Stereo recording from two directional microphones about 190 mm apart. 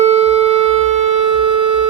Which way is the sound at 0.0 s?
35° right (ahead or behind).